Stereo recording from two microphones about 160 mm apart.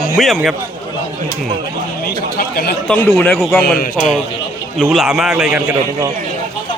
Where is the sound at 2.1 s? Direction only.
75° left (ahead or behind).